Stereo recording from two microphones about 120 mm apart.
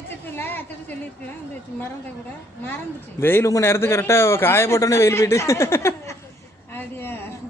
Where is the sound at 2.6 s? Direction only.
20° left (ahead or behind).